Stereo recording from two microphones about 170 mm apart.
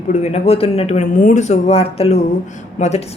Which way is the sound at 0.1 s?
40° left (ahead or behind).